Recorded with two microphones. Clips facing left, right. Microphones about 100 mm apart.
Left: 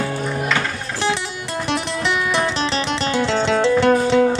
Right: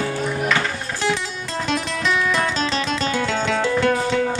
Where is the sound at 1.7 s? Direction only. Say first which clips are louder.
Left 1 dB; 20° left (ahead or behind).